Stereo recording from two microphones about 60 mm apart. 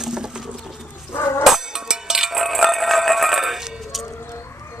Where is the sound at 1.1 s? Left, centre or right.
Left.